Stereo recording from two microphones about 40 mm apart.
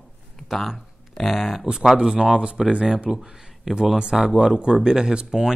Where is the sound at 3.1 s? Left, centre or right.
Centre.